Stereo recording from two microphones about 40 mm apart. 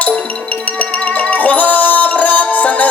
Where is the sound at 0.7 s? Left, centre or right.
Left.